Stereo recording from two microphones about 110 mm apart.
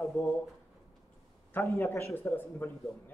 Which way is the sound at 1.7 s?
20° left (ahead or behind).